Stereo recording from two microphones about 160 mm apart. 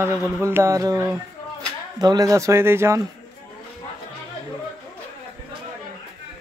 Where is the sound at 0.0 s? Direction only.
15° right (ahead or behind).